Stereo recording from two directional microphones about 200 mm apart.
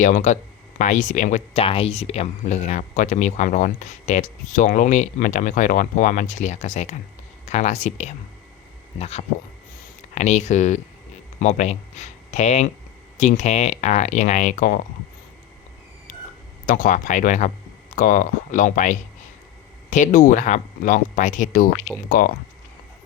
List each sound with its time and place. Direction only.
0.0 s speech: 35° left (ahead or behind)
16.6 s speech: 40° left (ahead or behind)